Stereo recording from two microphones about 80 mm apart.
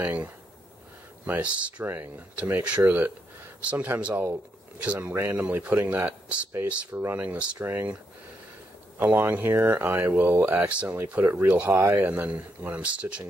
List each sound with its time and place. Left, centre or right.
0.0 s speech: right
7.5 s speech: right
9.0 s speech: right
11.7 s speech: right
12.0 s speech: centre